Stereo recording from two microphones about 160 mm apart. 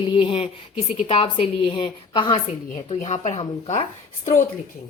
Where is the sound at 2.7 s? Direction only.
45° left (ahead or behind).